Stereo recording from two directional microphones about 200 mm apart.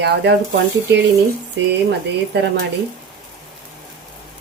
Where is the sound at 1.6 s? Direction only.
65° right (ahead or behind).